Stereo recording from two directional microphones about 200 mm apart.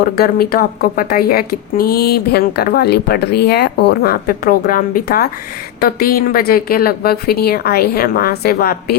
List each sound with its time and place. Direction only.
0.0 s speech: 50° left (ahead or behind)